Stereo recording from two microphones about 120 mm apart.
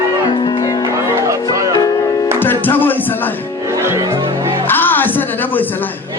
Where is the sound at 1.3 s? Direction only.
30° right (ahead or behind).